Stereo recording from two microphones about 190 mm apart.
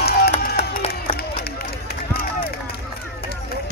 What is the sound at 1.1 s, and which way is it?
Run, 55° left (ahead or behind).